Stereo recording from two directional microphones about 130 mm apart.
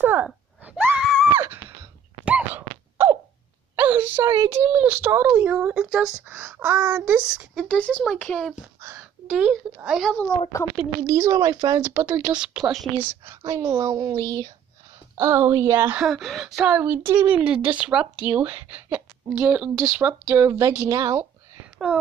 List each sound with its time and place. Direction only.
0.0 s speech: 15° right (ahead or behind)
0.7 s a sound: 15° right (ahead or behind)
3.7 s speech: 15° right (ahead or behind)
7.6 s speech: 10° left (ahead or behind)
8.8 s a sound: 15° right (ahead or behind)
9.9 s speech: 5° left (ahead or behind)
11.1 s speech: 25° right (ahead or behind)
12.4 s speech: 5° right (ahead or behind)
12.9 s speech: 15° right (ahead or behind)
16.0 s speech: centre (ahead or behind)
16.5 s speech: 10° right (ahead or behind)
17.3 s speech: 10° right (ahead or behind)
21.8 s speech: 5° right (ahead or behind)